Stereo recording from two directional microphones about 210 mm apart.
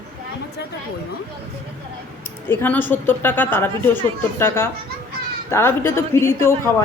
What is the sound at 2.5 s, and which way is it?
Speech, 10° left (ahead or behind).